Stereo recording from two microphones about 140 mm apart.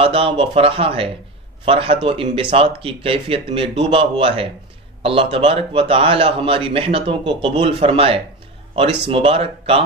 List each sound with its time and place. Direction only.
0.0 s a man's voice: 40° right (ahead or behind)
7.5 s a man's voice: 45° right (ahead or behind)